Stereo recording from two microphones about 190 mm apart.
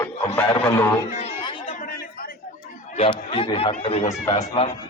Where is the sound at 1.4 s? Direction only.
25° left (ahead or behind).